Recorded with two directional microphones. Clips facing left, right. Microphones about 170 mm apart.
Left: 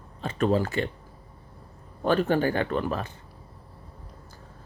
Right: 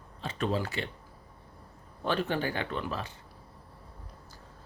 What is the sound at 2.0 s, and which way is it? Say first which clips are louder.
Speech: left 7 dB; 45° left (ahead or behind).